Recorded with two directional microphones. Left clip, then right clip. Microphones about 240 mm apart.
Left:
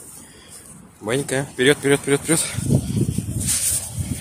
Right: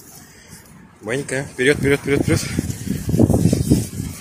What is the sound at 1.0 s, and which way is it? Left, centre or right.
Speech, centre.